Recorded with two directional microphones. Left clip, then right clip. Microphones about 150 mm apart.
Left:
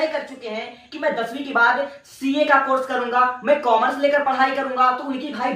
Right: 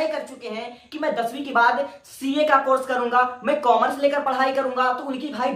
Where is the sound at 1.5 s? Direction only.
15° right (ahead or behind).